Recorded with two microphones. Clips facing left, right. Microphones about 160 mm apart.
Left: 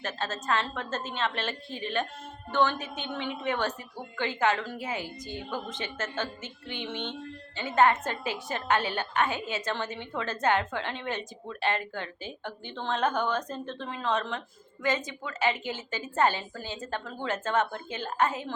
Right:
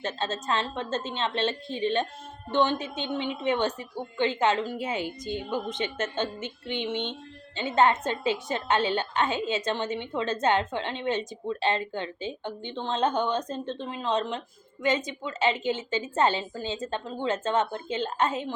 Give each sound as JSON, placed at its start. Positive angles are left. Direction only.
{"t": 0.0, "sound": "a woman's voice", "side_deg": -20}